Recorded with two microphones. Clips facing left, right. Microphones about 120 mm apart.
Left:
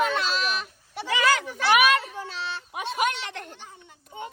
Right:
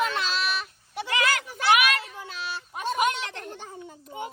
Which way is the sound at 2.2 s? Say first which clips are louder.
Left 2 dB; 30° left (ahead or behind).